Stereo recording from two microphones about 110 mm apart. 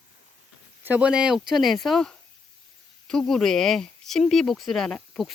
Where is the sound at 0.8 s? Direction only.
15° right (ahead or behind).